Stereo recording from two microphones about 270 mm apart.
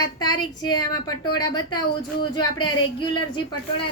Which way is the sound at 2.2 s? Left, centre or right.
Centre.